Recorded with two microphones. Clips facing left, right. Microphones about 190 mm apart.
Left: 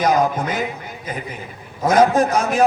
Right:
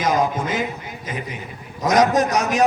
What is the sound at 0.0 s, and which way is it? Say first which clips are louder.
Speech: left 3 dB; 45° right (ahead or behind).